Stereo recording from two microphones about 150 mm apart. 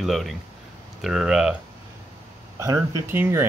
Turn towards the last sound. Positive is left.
turn(degrees=-15)  # may be behind; listen again after turning